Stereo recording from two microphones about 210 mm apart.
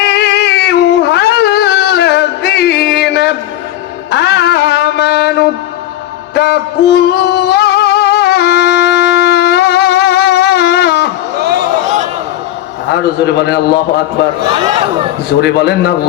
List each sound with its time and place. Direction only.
0.0 s a sound: 50° left (ahead or behind)
4.1 s music: 55° left (ahead or behind)
11.3 s a sound: 50° right (ahead or behind)
12.9 s a man's voice: 50° left (ahead or behind)
14.5 s speech: 25° right (ahead or behind)
15.3 s a man's voice: 50° left (ahead or behind)